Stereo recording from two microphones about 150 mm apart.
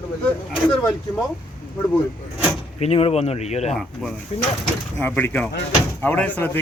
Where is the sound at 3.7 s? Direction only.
5° left (ahead or behind).